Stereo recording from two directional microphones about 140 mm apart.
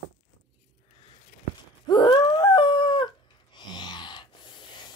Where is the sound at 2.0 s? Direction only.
35° left (ahead or behind).